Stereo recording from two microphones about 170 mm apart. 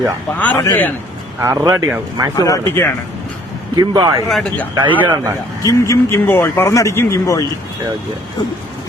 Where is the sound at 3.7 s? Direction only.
20° right (ahead or behind).